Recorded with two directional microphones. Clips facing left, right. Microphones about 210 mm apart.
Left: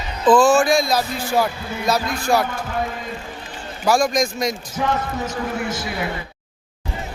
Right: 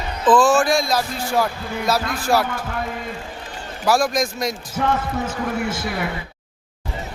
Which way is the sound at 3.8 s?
Centre (ahead or behind).